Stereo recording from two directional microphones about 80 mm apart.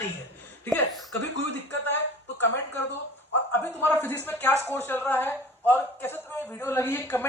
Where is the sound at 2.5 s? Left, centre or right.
Left.